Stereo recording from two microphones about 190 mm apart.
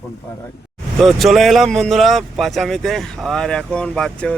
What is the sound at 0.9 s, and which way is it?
Speech, centre (ahead or behind).